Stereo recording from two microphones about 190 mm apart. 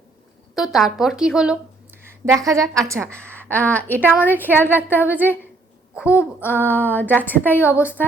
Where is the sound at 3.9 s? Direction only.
10° right (ahead or behind).